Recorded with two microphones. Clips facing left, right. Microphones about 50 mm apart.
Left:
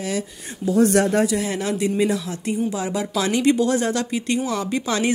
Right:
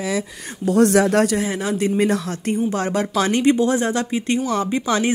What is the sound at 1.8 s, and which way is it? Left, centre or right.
A woman's voice, right.